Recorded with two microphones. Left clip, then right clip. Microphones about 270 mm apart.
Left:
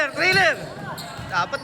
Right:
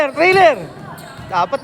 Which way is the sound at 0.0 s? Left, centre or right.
Centre.